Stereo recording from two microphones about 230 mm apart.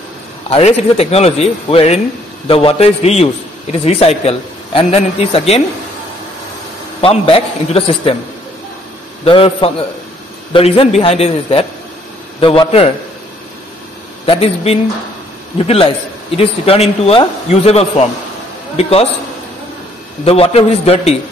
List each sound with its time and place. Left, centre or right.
0.5 s a man's voice: left
7.0 s a man's voice: left
9.2 s a man's voice: left
14.2 s a man's voice: left
20.2 s a man's voice: left